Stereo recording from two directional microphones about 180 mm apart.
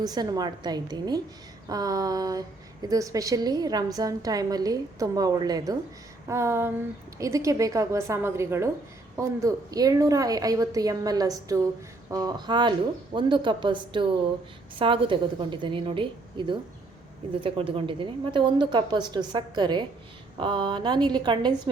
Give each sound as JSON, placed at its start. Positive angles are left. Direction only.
{"t": 0.0, "sound": "a woman's voice", "side_deg": -20}